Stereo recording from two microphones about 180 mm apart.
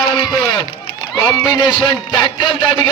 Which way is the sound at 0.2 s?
20° left (ahead or behind).